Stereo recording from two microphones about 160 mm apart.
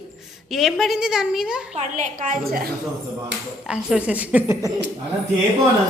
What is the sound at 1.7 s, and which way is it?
Speech, 50° right (ahead or behind).